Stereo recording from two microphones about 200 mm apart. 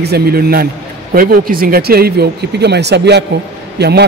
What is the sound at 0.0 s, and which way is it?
A man's voice, 50° right (ahead or behind).